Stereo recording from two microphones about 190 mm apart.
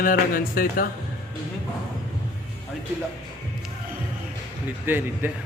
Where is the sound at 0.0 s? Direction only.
50° left (ahead or behind).